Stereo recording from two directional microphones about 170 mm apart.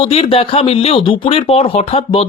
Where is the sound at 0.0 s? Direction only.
35° left (ahead or behind).